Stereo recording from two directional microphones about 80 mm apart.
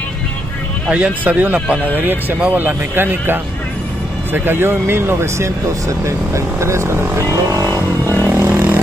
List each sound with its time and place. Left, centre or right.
0.8 s speech: centre; by 7.8 s right
8.0 s speech: left
8.3 s a sound: right